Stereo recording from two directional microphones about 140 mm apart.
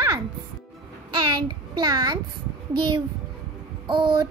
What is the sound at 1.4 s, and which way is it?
A child's voice, 30° right (ahead or behind).